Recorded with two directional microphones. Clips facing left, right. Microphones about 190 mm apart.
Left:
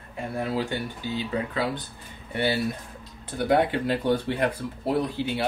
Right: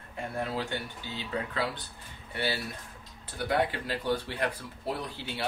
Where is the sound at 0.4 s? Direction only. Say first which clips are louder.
Left 5 dB; 10° left (ahead or behind).